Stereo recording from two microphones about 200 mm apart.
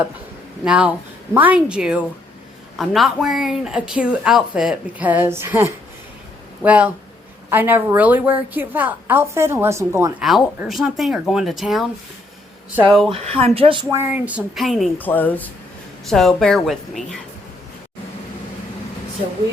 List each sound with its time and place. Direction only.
0.6 s a woman's voice: 5° right (ahead or behind)
10.2 s a woman's voice: centre (ahead or behind)
13.1 s speech: 30° right (ahead or behind)
13.9 s a woman's voice: 10° right (ahead or behind)